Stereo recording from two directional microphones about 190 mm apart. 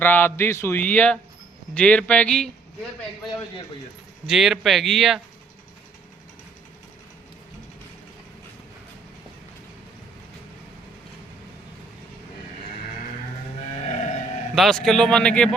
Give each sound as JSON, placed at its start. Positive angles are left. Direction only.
{"t": 0.0, "sound": "speech", "side_deg": 10}
{"t": 4.3, "sound": "speech", "side_deg": 0}
{"t": 13.8, "sound": "music", "side_deg": 35}
{"t": 14.5, "sound": "speech", "side_deg": 0}